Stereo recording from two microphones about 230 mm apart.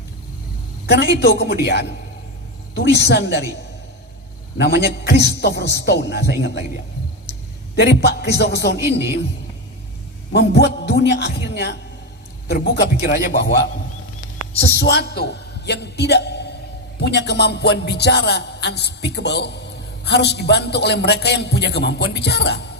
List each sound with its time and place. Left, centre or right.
0.9 s a man's voice: left
4.5 s a man's voice: left
7.8 s a man's voice: left
10.3 s a man's voice: left
14.6 s a man's voice: left